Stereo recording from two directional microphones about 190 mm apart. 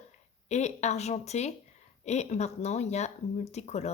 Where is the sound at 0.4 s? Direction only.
35° left (ahead or behind).